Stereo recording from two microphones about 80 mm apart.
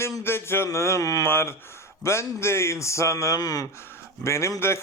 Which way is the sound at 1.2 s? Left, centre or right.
Left.